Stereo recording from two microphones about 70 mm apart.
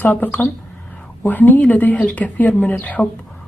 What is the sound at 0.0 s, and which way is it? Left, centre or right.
A woman's voice, left.